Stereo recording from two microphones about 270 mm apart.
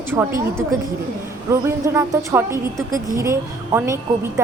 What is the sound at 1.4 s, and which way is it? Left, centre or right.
A woman's voice, centre.